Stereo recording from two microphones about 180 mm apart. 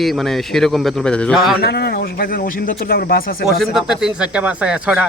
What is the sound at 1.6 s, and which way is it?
Speech, 65° left (ahead or behind).